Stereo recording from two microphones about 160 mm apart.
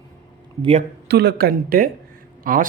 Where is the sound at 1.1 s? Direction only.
90° right; by 1.9 s 70° right (ahead or behind).